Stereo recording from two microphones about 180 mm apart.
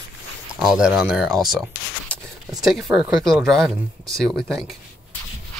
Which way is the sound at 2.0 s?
Centre (ahead or behind).